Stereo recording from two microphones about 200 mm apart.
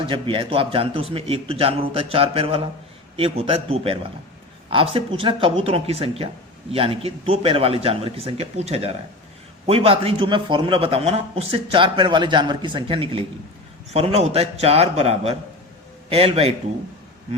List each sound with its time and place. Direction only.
0.1 s a man's voice: 25° right (ahead or behind)